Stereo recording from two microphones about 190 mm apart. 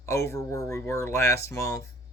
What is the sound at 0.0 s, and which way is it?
Speech, 15° left (ahead or behind).